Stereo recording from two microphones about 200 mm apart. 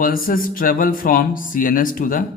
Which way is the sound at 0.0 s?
45° left (ahead or behind).